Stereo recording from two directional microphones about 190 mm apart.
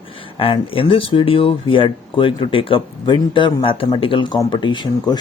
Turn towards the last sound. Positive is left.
turn(degrees=25)  # may be behind; listen again after turning